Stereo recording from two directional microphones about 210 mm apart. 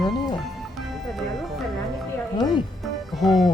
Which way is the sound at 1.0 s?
Centre (ahead or behind).